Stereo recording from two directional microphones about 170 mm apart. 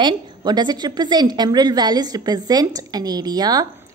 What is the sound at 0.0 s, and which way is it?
A woman's voice, 25° right (ahead or behind).